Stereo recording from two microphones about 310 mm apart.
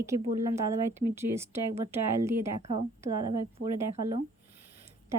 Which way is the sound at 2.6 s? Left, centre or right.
Right.